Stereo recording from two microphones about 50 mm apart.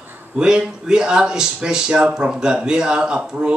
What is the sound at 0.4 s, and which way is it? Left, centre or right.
Speech, centre.